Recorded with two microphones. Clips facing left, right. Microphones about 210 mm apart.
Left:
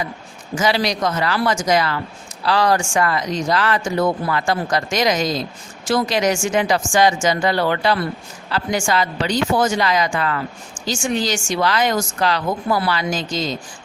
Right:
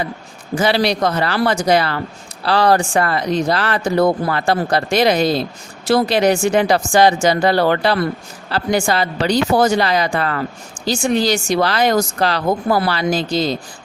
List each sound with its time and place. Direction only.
1.0 s speech: 35° right (ahead or behind)